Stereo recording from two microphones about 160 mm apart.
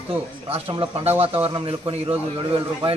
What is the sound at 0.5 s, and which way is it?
A man's voice, 35° right (ahead or behind).